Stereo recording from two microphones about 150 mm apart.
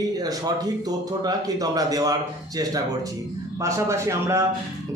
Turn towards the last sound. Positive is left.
turn(degrees=-20)  # may be behind; listen again after turning